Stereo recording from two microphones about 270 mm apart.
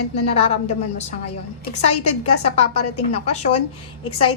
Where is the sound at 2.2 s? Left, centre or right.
Left.